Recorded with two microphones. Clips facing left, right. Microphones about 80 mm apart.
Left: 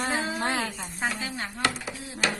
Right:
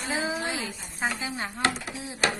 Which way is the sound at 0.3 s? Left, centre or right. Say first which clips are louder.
Left 3 dB; left.